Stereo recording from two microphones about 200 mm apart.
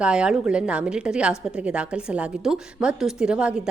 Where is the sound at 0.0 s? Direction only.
5° right (ahead or behind).